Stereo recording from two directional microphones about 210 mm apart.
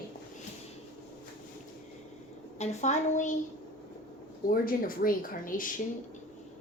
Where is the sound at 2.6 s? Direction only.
35° left (ahead or behind).